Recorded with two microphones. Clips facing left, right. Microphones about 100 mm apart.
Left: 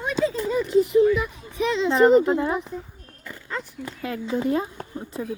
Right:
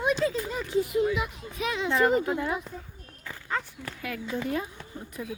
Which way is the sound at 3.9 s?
25° left (ahead or behind).